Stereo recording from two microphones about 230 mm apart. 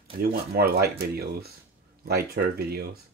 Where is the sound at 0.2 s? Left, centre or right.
Right.